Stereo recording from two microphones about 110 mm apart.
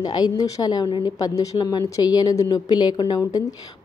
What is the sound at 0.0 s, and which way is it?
A woman's voice, 40° left (ahead or behind).